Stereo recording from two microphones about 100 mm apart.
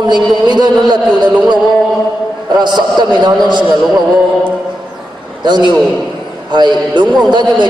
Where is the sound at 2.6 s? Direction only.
50° right (ahead or behind).